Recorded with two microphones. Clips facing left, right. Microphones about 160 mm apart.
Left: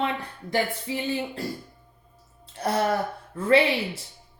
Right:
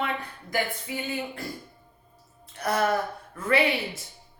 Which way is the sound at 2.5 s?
30° left (ahead or behind).